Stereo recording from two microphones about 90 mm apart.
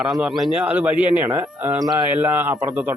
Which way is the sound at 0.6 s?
15° right (ahead or behind).